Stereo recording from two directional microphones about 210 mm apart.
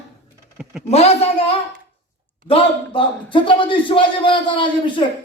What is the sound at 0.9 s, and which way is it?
Speech, 30° left (ahead or behind).